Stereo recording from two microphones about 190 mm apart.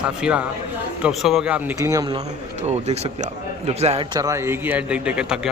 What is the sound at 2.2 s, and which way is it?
Speech, 35° right (ahead or behind).